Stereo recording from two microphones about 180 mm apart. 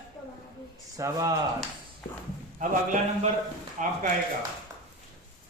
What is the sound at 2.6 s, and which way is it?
A man's voice, 45° right (ahead or behind).